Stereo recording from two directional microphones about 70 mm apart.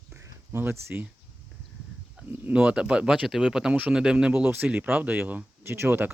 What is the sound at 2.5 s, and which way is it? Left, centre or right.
Speech, centre.